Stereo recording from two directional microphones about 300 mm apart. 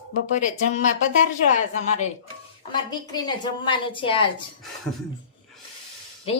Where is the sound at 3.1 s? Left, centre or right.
Centre.